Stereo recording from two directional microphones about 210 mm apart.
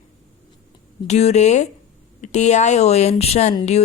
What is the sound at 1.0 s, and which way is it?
Speech, 30° left (ahead or behind).